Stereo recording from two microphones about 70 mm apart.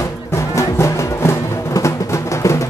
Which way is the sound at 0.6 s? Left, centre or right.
Left.